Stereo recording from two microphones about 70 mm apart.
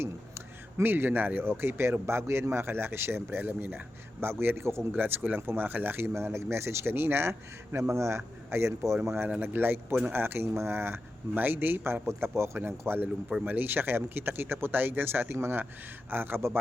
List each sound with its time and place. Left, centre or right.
0.0 s speech: right
4.9 s speech: right